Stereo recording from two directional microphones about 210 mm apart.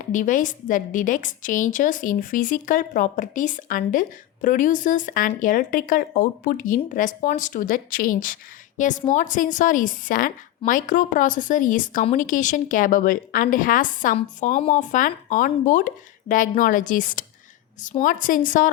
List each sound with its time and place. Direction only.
0.0 s a woman's voice: 40° left (ahead or behind)